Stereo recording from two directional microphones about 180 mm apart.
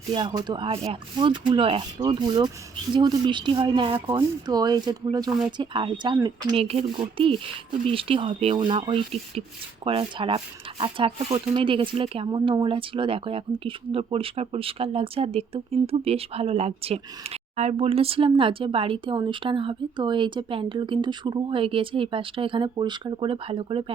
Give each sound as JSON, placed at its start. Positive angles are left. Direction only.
{"t": 0.1, "sound": "speech", "side_deg": -25}